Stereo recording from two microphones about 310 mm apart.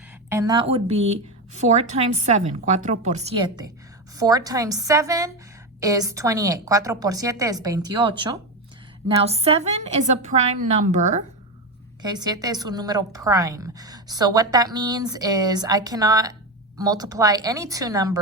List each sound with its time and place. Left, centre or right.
0.3 s a woman's voice: centre